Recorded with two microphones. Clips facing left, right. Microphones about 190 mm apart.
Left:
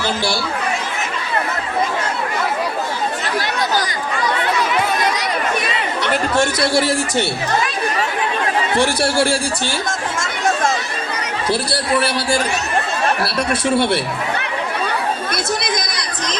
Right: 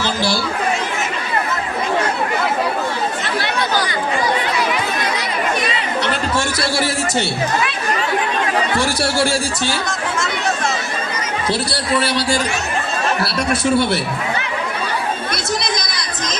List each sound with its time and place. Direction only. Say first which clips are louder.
8.7 s speech: left 2 dB; 25° left (ahead or behind)
13.5 s speech: right 1 dB; 25° left (ahead or behind)